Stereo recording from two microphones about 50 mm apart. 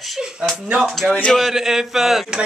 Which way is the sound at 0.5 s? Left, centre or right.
Right.